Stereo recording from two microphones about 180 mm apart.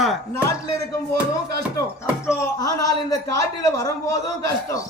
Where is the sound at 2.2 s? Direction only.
15° left (ahead or behind).